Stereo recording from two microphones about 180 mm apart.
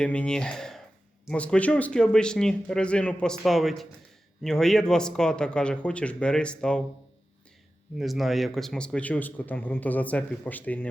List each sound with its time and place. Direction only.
0.0 s speech: 5° left (ahead or behind)
7.9 s a man's voice: centre (ahead or behind)